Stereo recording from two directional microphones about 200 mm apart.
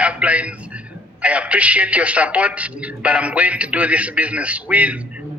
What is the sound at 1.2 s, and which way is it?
A man's voice, 5° right (ahead or behind).